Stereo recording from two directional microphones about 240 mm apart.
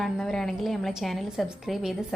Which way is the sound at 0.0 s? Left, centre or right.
Centre.